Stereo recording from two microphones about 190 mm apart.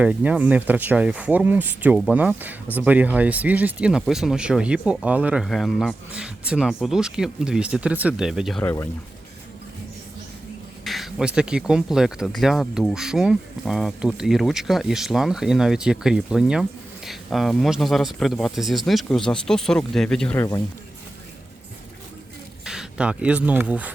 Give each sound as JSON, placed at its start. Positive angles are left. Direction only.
{"t": 0.0, "sound": "speech", "side_deg": -5}
{"t": 8.6, "sound": "speech", "side_deg": 15}
{"t": 10.8, "sound": "speech", "side_deg": 0}
{"t": 22.6, "sound": "speech", "side_deg": -5}